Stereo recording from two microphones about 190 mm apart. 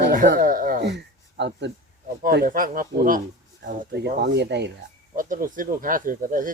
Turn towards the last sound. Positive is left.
turn(degrees=-45)  # may be behind; listen again after turning